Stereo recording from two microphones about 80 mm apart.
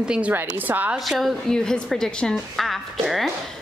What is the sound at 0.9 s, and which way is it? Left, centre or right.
Speech, centre.